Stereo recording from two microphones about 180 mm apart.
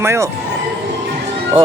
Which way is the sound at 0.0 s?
15° right (ahead or behind).